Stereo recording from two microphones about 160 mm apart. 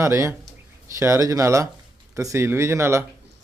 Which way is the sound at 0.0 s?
15° right (ahead or behind).